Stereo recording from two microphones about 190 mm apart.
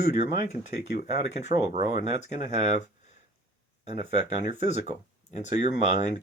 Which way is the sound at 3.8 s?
30° right (ahead or behind).